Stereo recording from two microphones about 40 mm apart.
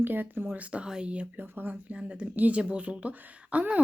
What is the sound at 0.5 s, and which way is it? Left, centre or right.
Speech, right.